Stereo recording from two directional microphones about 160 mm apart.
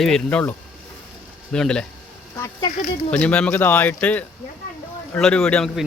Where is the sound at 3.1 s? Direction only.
5° left (ahead or behind).